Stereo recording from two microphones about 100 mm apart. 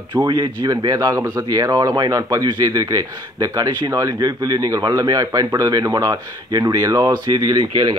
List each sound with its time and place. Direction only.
0.1 s speech: 40° right (ahead or behind)